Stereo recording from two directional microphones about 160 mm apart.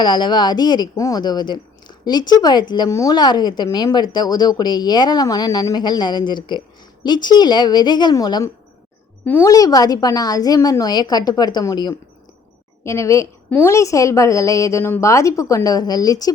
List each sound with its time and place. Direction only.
0.0 s a woman's voice: 30° left (ahead or behind)
9.2 s a woman's voice: 10° left (ahead or behind)
9.5 s a woman's voice: 25° left (ahead or behind)